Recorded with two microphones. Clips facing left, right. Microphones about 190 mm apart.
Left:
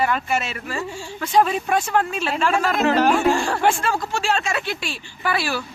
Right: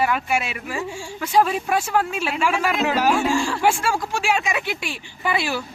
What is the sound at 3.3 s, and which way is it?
Speech, 60° left (ahead or behind).